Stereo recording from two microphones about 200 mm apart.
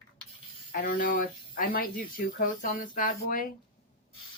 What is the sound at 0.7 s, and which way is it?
Speech, 45° left (ahead or behind).